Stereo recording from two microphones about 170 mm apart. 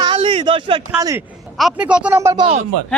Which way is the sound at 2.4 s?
40° right (ahead or behind).